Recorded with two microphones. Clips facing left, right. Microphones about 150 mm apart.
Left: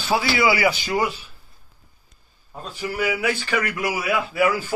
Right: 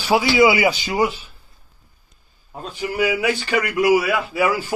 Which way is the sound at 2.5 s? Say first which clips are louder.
Right 3 dB; 15° right (ahead or behind).